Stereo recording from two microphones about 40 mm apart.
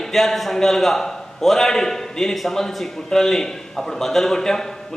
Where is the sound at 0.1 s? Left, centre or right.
Centre.